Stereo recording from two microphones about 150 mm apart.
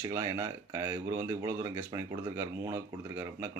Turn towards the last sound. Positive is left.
turn(degrees=-20)  # may be behind; listen again after turning